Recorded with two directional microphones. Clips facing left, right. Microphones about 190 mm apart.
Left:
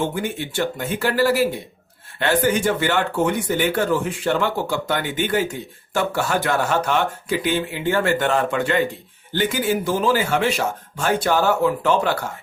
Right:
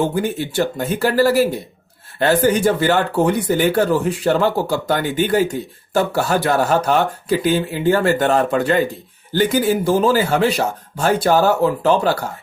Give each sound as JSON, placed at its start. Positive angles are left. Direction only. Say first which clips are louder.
{"t": 0.0, "sound": "speech", "louder": "right 5 dB", "side_deg": -40}